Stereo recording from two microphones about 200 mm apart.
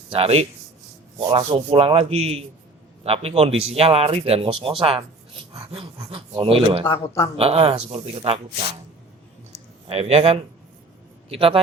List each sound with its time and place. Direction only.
0.1 s speech: 30° right (ahead or behind)
9.8 s speech: 30° right (ahead or behind)